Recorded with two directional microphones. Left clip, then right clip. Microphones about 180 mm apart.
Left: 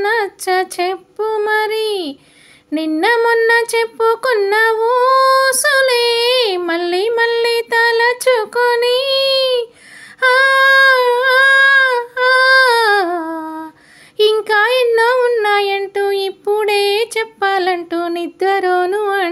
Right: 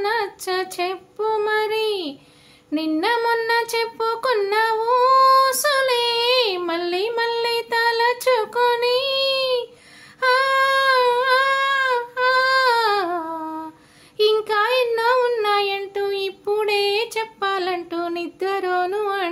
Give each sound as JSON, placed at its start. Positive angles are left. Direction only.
{"t": 0.0, "sound": "female singing", "side_deg": 35}
{"t": 2.7, "sound": "a sound", "side_deg": 35}
{"t": 10.2, "sound": "female singing", "side_deg": 35}
{"t": 14.1, "sound": "child singing", "side_deg": 35}